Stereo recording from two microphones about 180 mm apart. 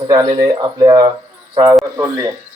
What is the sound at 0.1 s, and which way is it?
Speech, 25° right (ahead or behind).